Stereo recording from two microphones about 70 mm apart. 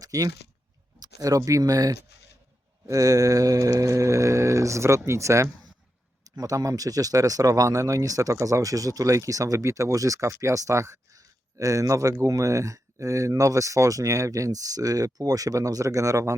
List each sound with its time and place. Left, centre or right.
0.0 s speech: right
6.3 s speech: right